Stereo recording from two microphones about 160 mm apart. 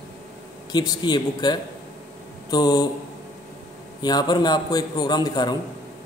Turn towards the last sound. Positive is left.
turn(degrees=25)  # may be behind; listen again after turning